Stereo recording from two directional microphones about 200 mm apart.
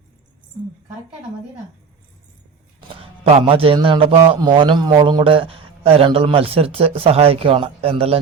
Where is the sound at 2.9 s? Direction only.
25° right (ahead or behind).